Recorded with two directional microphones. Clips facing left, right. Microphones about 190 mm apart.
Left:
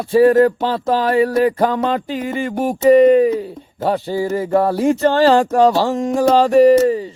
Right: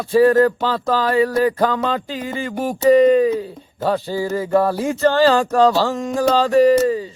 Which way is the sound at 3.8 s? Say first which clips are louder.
Left 2 dB; 20° left (ahead or behind).